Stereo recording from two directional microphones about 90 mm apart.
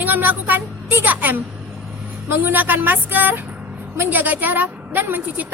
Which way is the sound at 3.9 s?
20° right (ahead or behind).